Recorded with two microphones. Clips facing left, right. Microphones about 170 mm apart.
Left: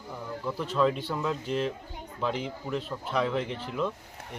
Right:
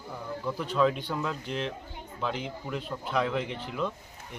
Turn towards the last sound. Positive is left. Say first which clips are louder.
# left 1 dB
turn(degrees=0)  # may be behind; listen again after turning